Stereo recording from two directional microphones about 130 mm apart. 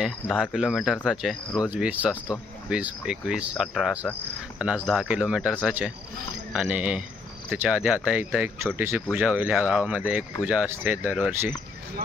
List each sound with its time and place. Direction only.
0.4 s speech: 5° right (ahead or behind)
1.7 s speech: 10° right (ahead or behind)